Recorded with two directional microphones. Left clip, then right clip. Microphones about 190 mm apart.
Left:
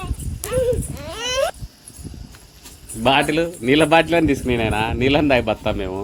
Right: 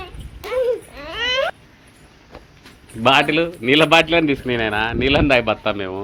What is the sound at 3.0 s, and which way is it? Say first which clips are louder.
A man's voice: right 2 dB; 25° left (ahead or behind).